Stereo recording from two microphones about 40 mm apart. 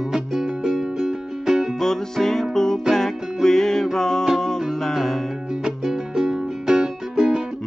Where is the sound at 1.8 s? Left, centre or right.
Centre.